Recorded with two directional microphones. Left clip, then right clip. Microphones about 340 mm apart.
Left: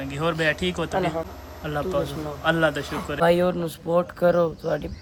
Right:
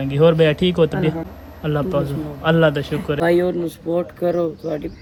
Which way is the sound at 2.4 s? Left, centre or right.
Centre.